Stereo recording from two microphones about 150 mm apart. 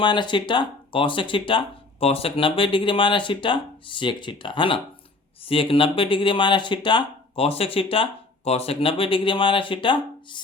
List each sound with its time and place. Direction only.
0.0 s speech: 30° left (ahead or behind)